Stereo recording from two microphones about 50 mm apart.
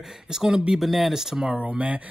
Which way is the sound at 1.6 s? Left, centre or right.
Right.